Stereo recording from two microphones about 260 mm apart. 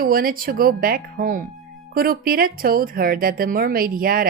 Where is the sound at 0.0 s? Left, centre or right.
Right.